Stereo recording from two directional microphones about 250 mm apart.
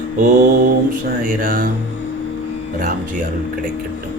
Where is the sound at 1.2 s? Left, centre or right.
Right.